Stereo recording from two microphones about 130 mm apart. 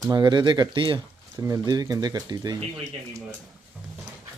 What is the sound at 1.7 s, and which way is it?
Speech, 30° right (ahead or behind).